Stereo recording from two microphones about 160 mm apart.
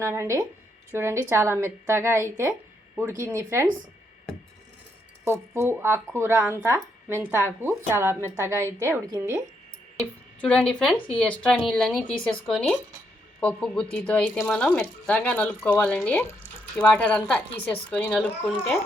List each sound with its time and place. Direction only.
0.0 s speech: 15° right (ahead or behind)
2.5 s a sound: 5° right (ahead or behind)
3.2 s speech: 15° right (ahead or behind)
5.2 s speech: 15° right (ahead or behind)
10.0 s speech: 5° left (ahead or behind)